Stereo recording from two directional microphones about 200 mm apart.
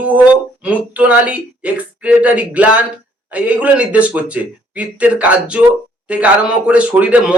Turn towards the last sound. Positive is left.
turn(degrees=-5)  # may be behind; listen again after turning